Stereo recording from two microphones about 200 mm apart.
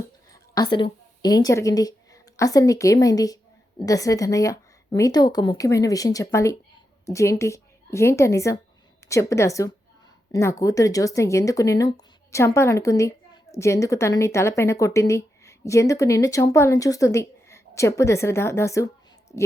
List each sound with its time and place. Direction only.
0.5 s a woman's voice: 20° left (ahead or behind)